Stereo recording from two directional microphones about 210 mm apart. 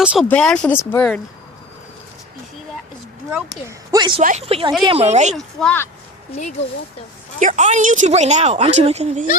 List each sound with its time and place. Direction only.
0.0 s speech: 5° right (ahead or behind)
3.7 s speech: 20° right (ahead or behind)
4.2 s speech: 35° right (ahead or behind)
5.3 s speech: centre (ahead or behind)
7.3 s speech: 35° right (ahead or behind)